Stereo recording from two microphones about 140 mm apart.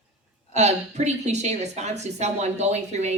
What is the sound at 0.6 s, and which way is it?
A woman's voice, 55° right (ahead or behind).